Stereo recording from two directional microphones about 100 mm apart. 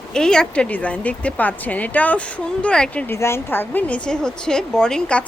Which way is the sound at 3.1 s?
25° left (ahead or behind).